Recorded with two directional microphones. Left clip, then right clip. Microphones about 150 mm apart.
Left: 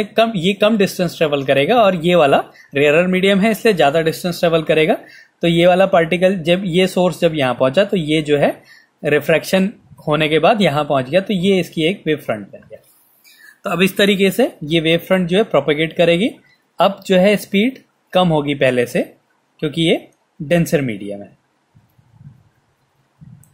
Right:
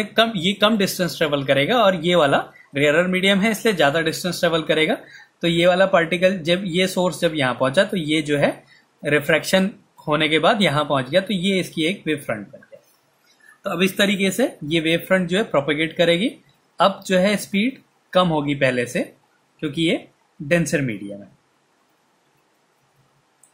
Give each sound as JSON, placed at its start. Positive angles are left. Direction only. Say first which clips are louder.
{"t": 0.0, "sound": "speech", "louder": "left 3 dB", "side_deg": 35}
{"t": 13.6, "sound": "speech", "louder": "left 4 dB", "side_deg": 65}
{"t": 14.3, "sound": "speech", "louder": "left 5 dB", "side_deg": 35}